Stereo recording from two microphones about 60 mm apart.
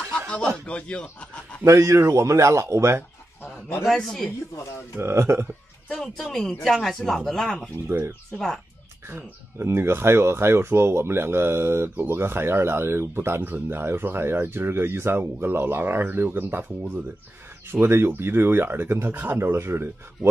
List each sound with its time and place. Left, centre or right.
0.7 s speech: centre
1.6 s speech: right
3.8 s speech: centre
4.9 s speech: right
5.9 s speech: centre
7.9 s speech: right
8.3 s speech: centre
9.1 s speech: right